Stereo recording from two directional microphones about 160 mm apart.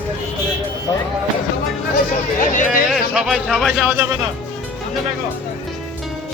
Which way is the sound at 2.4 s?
55° left (ahead or behind).